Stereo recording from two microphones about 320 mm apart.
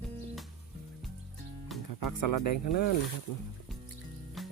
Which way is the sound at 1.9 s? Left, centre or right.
Left.